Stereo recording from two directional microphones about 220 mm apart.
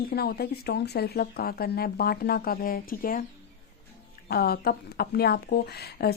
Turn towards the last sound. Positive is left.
turn(degrees=45)  # may be behind; listen again after turning